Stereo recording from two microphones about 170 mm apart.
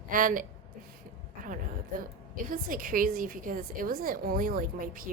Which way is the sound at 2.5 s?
55° right (ahead or behind).